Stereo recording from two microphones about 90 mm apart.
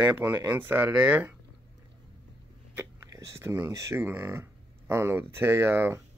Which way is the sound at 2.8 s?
30° right (ahead or behind).